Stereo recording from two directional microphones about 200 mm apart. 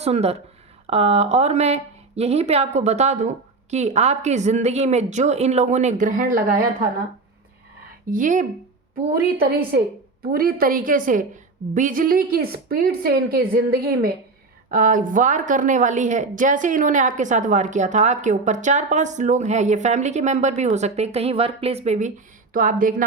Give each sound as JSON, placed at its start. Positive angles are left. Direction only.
{"t": 0.0, "sound": "a woman's voice", "side_deg": -30}
{"t": 8.1, "sound": "a woman's voice", "side_deg": -40}
{"t": 10.3, "sound": "a woman's voice", "side_deg": -45}